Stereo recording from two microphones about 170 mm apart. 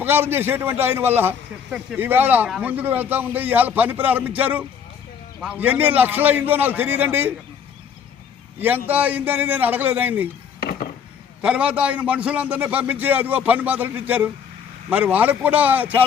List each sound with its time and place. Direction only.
0.0 s a man's voice: 15° right (ahead or behind)
8.5 s a man's voice: 10° right (ahead or behind)
10.6 s a sound: 60° left (ahead or behind)
11.4 s a man's voice: 5° right (ahead or behind)